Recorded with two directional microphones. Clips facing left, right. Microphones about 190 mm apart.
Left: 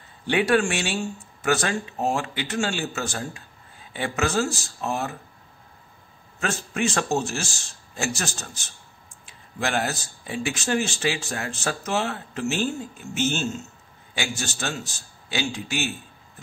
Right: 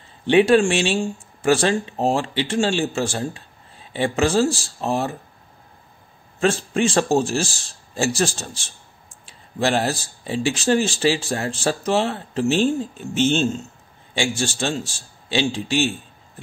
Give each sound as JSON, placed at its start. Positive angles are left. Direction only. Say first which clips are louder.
{"t": 0.3, "sound": "speech", "louder": "right 6 dB", "side_deg": -25}
{"t": 6.4, "sound": "speech", "louder": "right 7 dB", "side_deg": -30}